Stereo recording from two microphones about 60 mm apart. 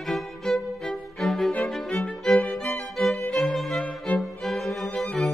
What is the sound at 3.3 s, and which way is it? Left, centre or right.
Violin, centre.